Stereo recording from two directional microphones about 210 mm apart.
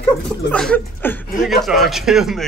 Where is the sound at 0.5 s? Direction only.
5° left (ahead or behind).